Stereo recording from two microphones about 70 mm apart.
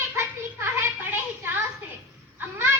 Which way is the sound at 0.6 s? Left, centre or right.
Right.